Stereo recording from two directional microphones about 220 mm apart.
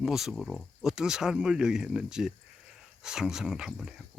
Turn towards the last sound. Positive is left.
turn(degrees=0)  # may be behind; listen again after turning